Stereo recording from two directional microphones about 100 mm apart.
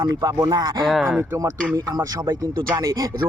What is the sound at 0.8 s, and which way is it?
Speech, centre (ahead or behind).